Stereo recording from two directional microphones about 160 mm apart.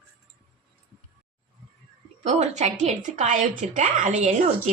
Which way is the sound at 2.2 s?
45° right (ahead or behind).